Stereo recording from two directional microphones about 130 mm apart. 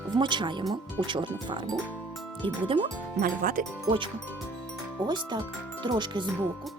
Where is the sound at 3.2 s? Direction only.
90° right.